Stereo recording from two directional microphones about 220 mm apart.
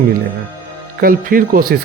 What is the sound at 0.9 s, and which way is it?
Speech, 40° right (ahead or behind).